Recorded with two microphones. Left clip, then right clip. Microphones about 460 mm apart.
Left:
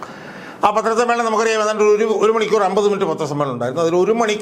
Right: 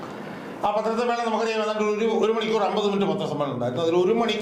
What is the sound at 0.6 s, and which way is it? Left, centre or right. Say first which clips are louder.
Speech: left 8 dB; left.